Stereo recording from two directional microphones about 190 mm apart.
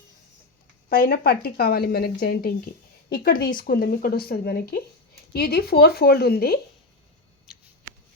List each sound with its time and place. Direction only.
0.9 s a woman's voice: 50° left (ahead or behind)